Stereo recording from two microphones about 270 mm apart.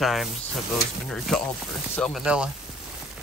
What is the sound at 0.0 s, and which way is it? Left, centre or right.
Speech, centre.